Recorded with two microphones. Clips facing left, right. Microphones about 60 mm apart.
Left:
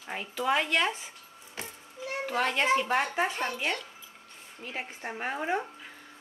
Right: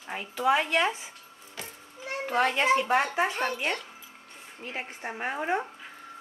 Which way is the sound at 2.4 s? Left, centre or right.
Centre.